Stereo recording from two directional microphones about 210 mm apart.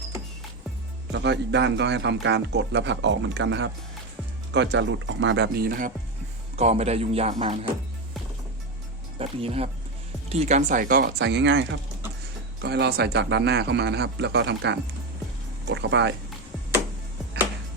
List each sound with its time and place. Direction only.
1.1 s a man's voice: 55° right (ahead or behind)
6.6 s speech: 30° right (ahead or behind)
9.1 s a man's voice: 30° right (ahead or behind); by 16.1 s 55° right (ahead or behind)